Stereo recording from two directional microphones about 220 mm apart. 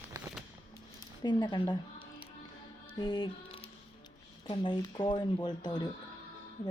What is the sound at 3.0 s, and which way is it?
Music, 20° left (ahead or behind).